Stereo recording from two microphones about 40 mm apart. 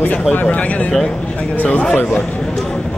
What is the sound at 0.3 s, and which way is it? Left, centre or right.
Speech, left.